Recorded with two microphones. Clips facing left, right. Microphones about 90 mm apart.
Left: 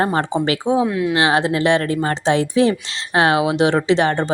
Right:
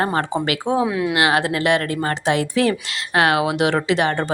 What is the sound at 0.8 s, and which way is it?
Speech, 5° right (ahead or behind).